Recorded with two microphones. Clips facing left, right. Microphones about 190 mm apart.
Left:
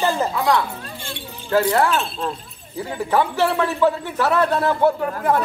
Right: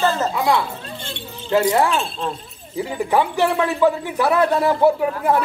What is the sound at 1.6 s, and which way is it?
Speech, 10° right (ahead or behind).